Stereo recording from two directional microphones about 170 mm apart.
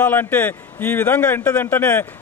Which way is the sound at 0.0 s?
10° left (ahead or behind).